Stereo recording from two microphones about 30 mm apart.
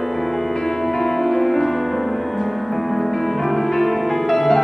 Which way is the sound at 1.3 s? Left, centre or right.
Centre.